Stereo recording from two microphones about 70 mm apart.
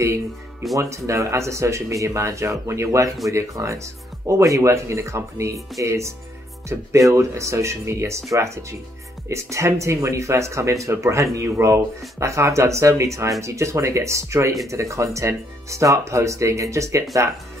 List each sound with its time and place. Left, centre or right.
0.7 s speech: right